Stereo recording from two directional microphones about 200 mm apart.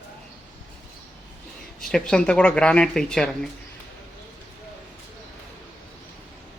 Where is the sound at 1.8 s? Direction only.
5° left (ahead or behind).